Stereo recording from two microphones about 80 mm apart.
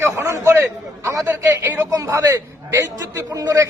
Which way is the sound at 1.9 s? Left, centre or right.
Right.